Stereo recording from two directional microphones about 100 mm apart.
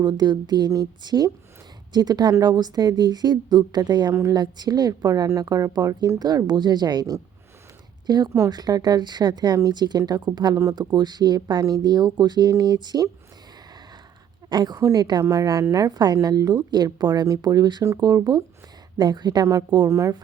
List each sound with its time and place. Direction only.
0.0 s speech: 45° right (ahead or behind)
4.1 s a woman's voice: 30° right (ahead or behind)
4.4 s a woman's voice: 45° right (ahead or behind)
14.5 s speech: 45° right (ahead or behind)
14.8 s a woman's voice: 30° right (ahead or behind)